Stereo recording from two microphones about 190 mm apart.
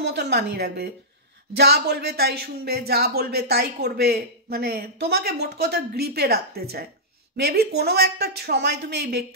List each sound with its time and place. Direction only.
0.0 s speech: 60° right (ahead or behind)